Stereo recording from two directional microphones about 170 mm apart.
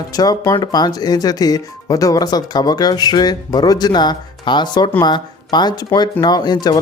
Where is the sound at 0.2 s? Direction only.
20° left (ahead or behind).